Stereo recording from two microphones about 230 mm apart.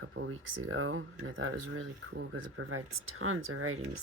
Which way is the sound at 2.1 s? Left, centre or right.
Right.